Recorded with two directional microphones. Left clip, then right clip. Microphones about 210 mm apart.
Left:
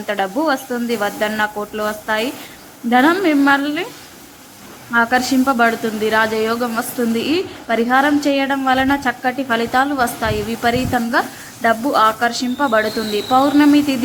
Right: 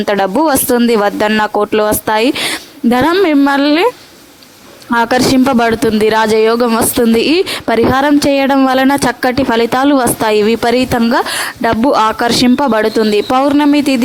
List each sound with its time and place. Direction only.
0.1 s speech: 45° right (ahead or behind)
4.9 s speech: 45° right (ahead or behind)